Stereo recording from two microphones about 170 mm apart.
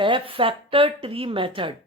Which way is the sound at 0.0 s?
30° right (ahead or behind).